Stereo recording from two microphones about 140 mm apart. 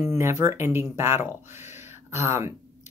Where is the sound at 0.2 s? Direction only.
20° right (ahead or behind).